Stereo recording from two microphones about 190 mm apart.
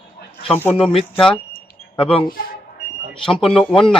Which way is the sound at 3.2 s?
Centre (ahead or behind).